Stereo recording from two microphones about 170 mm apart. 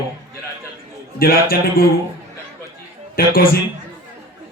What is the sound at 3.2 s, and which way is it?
Speech, 60° left (ahead or behind).